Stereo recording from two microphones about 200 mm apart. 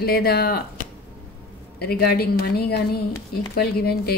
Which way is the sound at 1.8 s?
50° left (ahead or behind).